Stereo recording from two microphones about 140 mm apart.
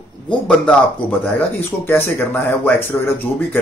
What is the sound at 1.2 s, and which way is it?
Speech, 15° left (ahead or behind).